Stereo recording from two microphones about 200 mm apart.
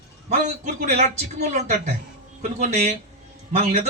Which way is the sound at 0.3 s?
35° right (ahead or behind).